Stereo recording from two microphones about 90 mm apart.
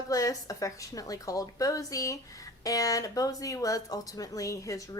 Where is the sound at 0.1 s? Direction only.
40° left (ahead or behind).